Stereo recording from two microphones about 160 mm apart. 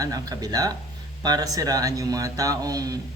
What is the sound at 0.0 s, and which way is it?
Speech, 25° right (ahead or behind).